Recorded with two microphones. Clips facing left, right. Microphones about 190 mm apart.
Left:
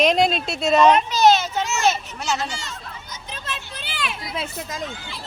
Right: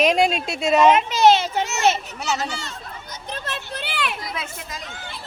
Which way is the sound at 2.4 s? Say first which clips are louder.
Right 1 dB; 60° right (ahead or behind).